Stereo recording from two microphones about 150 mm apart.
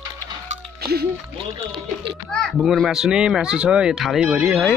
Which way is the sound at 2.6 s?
Centre (ahead or behind).